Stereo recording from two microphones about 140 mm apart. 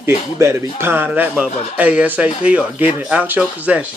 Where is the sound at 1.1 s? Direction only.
5° right (ahead or behind).